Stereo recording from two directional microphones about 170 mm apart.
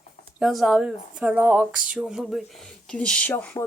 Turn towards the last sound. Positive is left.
turn(degrees=10)  # may be behind; listen again after turning